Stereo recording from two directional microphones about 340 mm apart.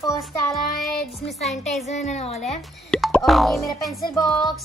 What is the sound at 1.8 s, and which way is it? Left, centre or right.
Speech, centre.